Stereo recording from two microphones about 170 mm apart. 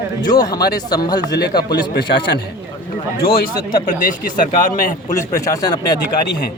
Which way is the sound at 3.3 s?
60° left (ahead or behind).